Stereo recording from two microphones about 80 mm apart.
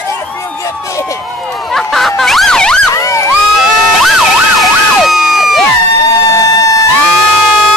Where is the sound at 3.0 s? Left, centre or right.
Left.